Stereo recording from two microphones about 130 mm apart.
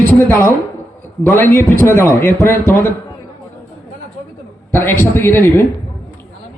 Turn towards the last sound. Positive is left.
turn(degrees=20)  # may be behind; listen again after turning